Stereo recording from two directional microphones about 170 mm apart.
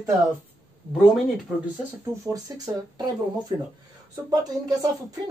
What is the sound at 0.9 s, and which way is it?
Speech, centre (ahead or behind).